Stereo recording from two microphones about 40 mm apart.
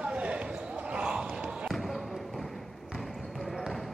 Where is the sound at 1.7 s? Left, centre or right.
Centre.